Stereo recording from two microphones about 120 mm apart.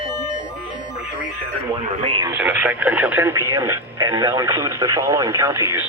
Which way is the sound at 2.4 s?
15° right (ahead or behind).